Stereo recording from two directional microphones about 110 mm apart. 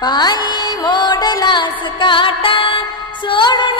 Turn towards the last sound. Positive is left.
turn(degrees=45)  # may be behind; listen again after turning